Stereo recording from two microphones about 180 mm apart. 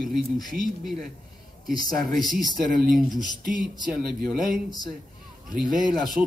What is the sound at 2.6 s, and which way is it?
Speech, 50° right (ahead or behind).